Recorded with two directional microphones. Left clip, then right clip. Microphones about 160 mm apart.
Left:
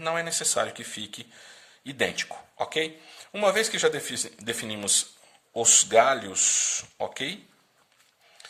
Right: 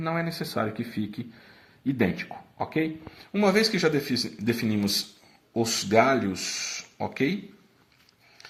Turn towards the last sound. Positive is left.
turn(degrees=30)  # may be behind; listen again after turning